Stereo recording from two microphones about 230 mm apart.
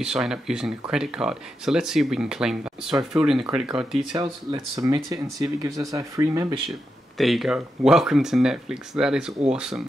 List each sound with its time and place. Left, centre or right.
0.0 s speech: centre
4.1 s speech: right
7.2 s speech: centre